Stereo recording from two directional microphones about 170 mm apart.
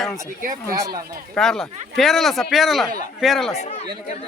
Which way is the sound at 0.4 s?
50° right (ahead or behind).